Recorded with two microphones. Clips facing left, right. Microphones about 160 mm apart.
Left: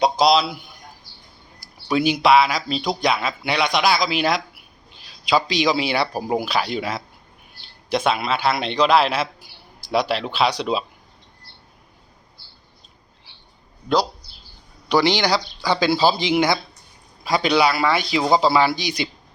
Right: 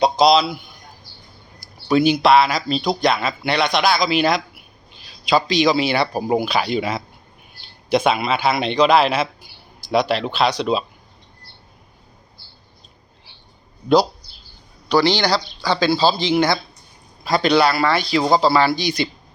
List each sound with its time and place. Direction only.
0.0 s a sound: 5° left (ahead or behind)
1.9 s speech: 5° left (ahead or behind)
14.8 s speech: 15° left (ahead or behind)